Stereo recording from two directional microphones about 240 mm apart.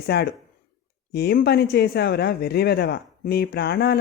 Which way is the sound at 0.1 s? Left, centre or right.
Left.